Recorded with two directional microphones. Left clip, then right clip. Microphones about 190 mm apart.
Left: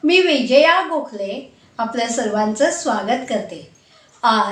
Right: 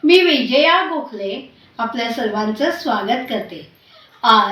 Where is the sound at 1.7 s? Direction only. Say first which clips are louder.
Left 1 dB; 15° left (ahead or behind).